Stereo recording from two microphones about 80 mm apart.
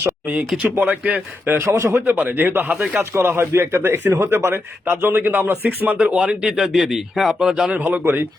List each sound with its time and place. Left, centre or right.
0.4 s speech: centre
0.8 s a man's voice: right
3.2 s a man's voice: right; by 7.7 s centre
7.7 s a man's voice: right